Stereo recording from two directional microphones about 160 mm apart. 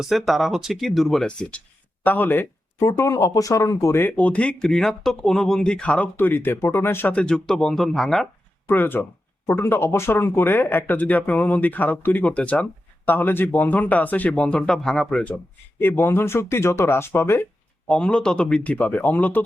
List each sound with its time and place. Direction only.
0.0 s speech: centre (ahead or behind)
8.6 s speech: 15° left (ahead or behind)
17.8 s speech: 5° left (ahead or behind)